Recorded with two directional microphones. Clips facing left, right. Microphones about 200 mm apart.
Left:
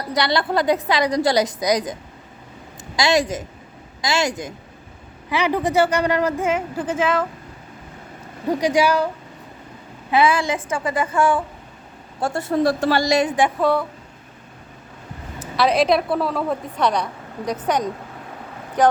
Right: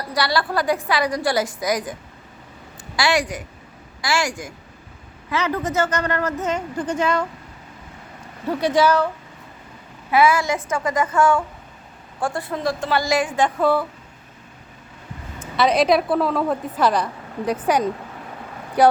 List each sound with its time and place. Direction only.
0.0 s a woman's voice: 20° left (ahead or behind); by 7.3 s centre (ahead or behind)
8.4 s a woman's voice: 10° left (ahead or behind)
10.1 s a woman's voice: 25° left (ahead or behind)
13.1 s a woman's voice: 20° left (ahead or behind)
13.6 s a woman's voice: centre (ahead or behind)
15.4 s a woman's voice: centre (ahead or behind)